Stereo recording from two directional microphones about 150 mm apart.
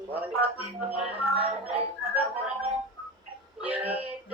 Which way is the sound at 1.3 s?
40° right (ahead or behind).